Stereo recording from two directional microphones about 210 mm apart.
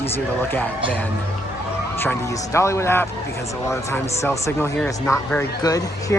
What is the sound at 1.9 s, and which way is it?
Speech, 10° left (ahead or behind).